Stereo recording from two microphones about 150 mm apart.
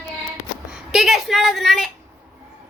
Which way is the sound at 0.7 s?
5° right (ahead or behind).